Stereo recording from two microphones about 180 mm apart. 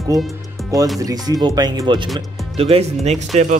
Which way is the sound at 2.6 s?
35° right (ahead or behind).